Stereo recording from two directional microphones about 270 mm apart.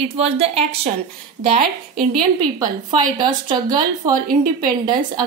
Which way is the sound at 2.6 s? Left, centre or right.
Centre.